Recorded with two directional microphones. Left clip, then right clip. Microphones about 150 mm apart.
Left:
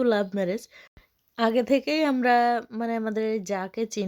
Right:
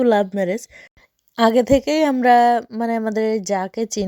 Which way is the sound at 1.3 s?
45° right (ahead or behind).